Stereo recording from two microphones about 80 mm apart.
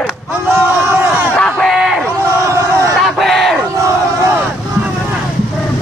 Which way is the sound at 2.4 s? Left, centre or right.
Right.